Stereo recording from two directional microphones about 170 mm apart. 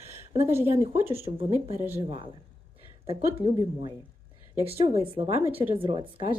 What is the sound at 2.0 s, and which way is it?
A woman's voice, 30° right (ahead or behind).